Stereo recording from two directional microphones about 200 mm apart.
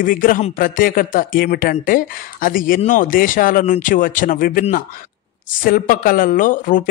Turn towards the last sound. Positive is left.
turn(degrees=40)  # may be behind; listen again after turning